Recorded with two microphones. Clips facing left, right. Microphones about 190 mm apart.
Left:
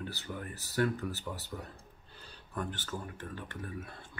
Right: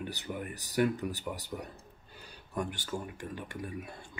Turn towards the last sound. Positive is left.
turn(degrees=-15)  # may be behind; listen again after turning